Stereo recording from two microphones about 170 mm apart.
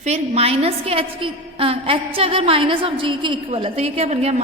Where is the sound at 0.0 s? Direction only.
40° right (ahead or behind).